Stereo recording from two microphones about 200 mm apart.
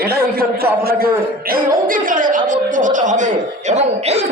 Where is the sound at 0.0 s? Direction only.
50° right (ahead or behind).